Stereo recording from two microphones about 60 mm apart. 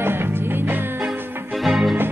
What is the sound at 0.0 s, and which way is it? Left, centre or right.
Music, right.